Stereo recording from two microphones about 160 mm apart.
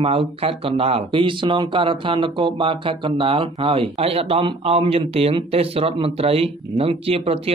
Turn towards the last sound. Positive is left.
turn(degrees=-35)  # may be behind; listen again after turning